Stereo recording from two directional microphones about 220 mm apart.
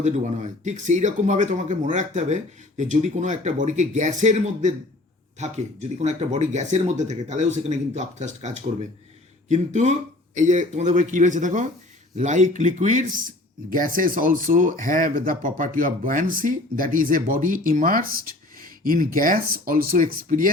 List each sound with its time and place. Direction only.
0.0 s speech: 30° right (ahead or behind)